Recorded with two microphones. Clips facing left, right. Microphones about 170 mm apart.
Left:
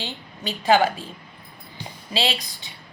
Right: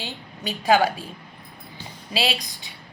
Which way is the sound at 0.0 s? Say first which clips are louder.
Left 1 dB; 15° right (ahead or behind).